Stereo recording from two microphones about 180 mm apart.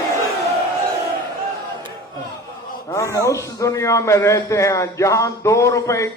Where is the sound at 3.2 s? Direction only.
15° left (ahead or behind).